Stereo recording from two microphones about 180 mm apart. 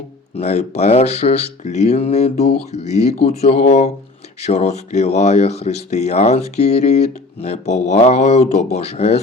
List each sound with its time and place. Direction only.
0.3 s speech: 35° left (ahead or behind)